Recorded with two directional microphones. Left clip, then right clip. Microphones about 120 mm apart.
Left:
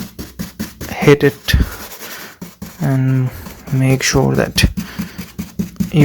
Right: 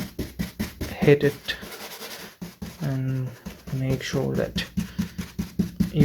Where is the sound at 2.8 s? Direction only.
60° left (ahead or behind).